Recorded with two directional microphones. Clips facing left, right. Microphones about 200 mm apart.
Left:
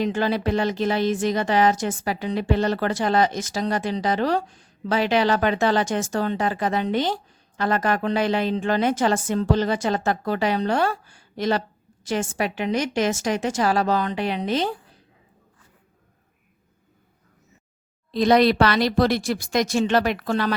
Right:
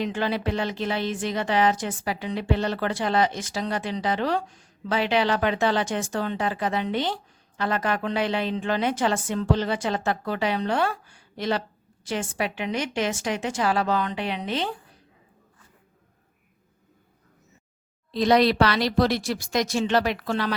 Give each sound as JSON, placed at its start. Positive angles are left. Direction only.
{"t": 0.0, "sound": "a woman's voice", "side_deg": 40}
{"t": 18.1, "sound": "speech", "side_deg": 50}